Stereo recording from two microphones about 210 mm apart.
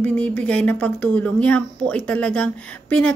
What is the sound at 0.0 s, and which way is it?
Speech, 10° left (ahead or behind).